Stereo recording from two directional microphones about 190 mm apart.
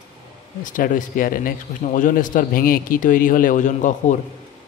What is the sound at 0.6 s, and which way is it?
Speech, 45° left (ahead or behind).